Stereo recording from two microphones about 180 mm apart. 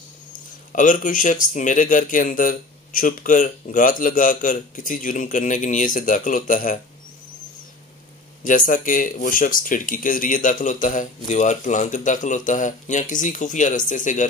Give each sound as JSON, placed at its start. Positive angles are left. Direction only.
{"t": 0.7, "sound": "speech", "side_deg": 45}
{"t": 8.5, "sound": "speech", "side_deg": 50}